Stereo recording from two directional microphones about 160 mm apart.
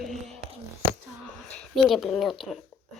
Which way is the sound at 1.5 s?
5° left (ahead or behind).